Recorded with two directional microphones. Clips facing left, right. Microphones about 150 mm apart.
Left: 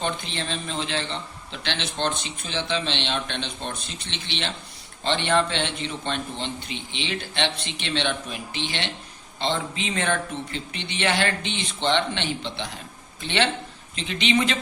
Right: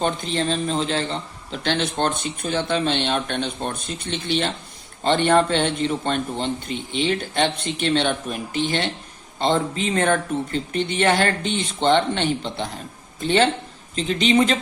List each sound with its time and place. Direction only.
0.0 s a man's voice: 40° right (ahead or behind)